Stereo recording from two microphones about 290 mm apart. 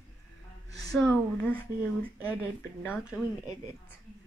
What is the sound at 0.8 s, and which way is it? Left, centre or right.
Speech, centre.